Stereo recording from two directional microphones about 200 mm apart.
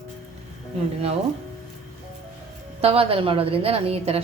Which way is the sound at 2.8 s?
30° right (ahead or behind).